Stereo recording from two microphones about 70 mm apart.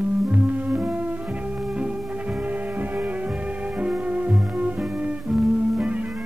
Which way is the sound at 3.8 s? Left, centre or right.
Centre.